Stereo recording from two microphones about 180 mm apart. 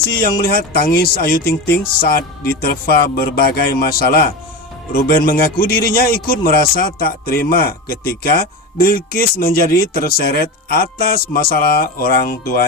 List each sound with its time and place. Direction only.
0.3 s speech: 55° left (ahead or behind)